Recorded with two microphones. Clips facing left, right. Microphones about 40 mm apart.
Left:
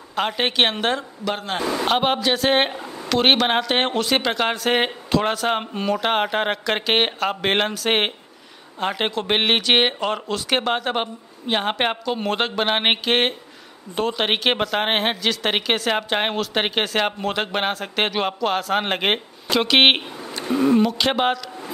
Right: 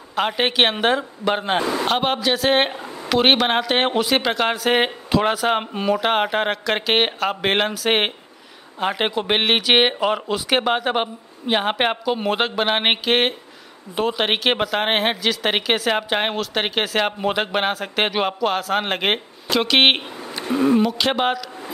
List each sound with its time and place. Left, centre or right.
0.1 s speech: centre
1.2 s speech: right
1.7 s speech: centre